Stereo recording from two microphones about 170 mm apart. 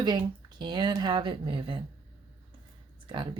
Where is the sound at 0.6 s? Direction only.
25° right (ahead or behind).